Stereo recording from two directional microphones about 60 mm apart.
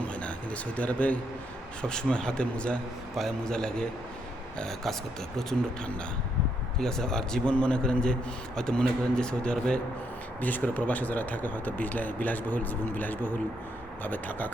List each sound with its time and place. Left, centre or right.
0.0 s a sound: left
1.8 s speech: centre
10.4 s speech: left